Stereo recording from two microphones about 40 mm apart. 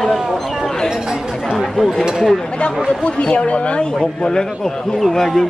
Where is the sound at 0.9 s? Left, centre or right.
Centre.